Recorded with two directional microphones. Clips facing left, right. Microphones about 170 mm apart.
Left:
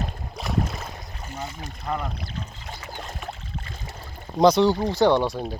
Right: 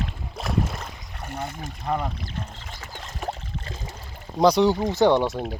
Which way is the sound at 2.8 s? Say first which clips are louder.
Right 4 dB; 40° right (ahead or behind).